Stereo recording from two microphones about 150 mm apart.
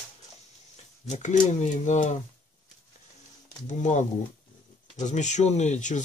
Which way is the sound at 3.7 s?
55° left (ahead or behind).